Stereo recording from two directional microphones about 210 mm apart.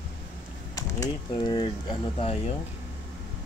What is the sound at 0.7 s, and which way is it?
Speech, 15° left (ahead or behind).